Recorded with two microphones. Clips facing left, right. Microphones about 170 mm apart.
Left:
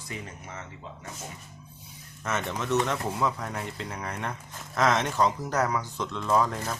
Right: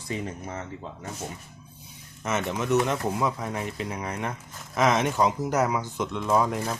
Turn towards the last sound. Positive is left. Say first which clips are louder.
# right 2 dB
turn(degrees=-10)  # may be behind; listen again after turning